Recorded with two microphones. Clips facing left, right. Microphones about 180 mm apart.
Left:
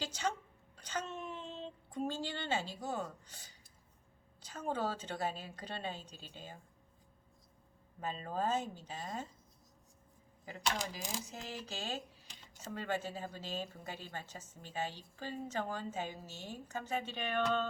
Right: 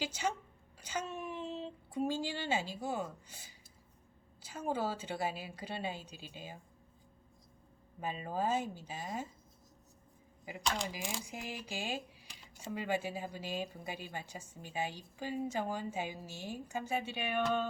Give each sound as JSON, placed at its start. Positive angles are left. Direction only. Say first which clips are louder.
{"t": 0.0, "sound": "a woman's voice", "louder": "right 1 dB", "side_deg": -10}
{"t": 8.0, "sound": "speech", "louder": "right 1 dB", "side_deg": -10}
{"t": 10.8, "sound": "speech", "louder": "right 2 dB", "side_deg": -10}